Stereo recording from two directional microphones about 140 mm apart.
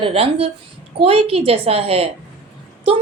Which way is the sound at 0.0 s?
45° right (ahead or behind).